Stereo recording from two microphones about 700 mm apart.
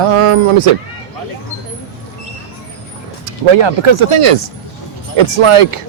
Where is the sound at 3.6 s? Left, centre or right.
Right.